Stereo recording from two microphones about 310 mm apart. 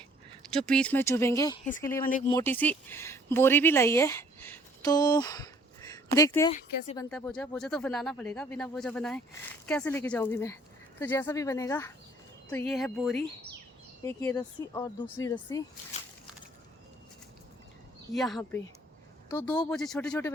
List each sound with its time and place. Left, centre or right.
0.5 s speech: centre
6.5 s speech: left
6.9 s speech: centre
18.1 s speech: centre